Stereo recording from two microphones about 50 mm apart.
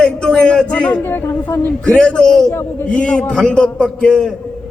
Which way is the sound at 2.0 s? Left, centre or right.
Left.